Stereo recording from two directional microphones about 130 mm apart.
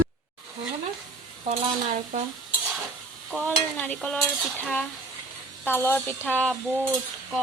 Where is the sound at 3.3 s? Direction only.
10° left (ahead or behind).